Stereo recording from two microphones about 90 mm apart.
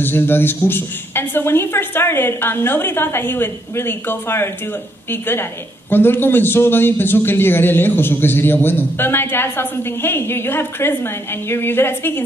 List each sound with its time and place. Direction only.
0.0 s speech: 25° left (ahead or behind)